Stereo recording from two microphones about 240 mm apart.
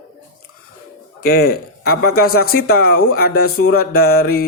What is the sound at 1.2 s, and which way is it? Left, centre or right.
Speech, left.